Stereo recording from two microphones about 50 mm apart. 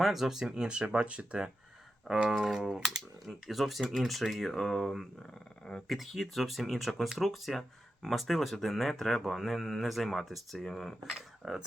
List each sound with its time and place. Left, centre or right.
0.0 s speech: centre
0.5 s typing: centre
0.9 s speech: right
2.1 s typing: centre
2.8 s speech: centre
10.6 s speech: centre
11.1 s speech: centre